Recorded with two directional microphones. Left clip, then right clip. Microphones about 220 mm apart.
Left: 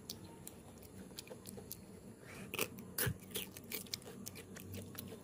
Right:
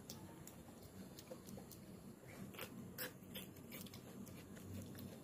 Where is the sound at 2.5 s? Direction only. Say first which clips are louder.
Left 12 dB; 30° left (ahead or behind).